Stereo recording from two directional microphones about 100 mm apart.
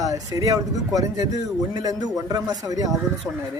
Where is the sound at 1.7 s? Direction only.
40° right (ahead or behind).